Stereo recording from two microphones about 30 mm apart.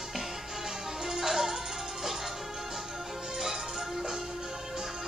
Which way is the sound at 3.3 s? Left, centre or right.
Centre.